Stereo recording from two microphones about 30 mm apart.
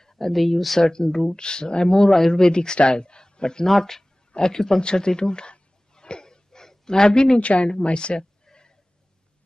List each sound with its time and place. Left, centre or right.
0.0 s a sound: centre
0.3 s speech: centre
0.7 s speech: left
1.3 s speech: left
1.9 s speech: centre
2.4 s speech: left
4.8 s a sound: left
7.3 s a woman's voice: left
7.8 s speech: left